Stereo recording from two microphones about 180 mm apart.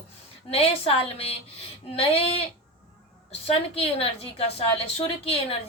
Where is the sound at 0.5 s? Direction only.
30° left (ahead or behind).